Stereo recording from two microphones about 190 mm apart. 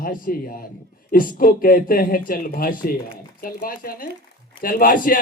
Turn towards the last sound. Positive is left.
turn(degrees=45)  # may be behind; listen again after turning